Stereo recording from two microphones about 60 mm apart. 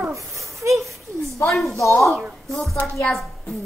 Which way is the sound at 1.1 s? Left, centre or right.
Right.